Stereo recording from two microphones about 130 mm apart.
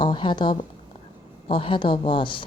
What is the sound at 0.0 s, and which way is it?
Speech, 35° left (ahead or behind).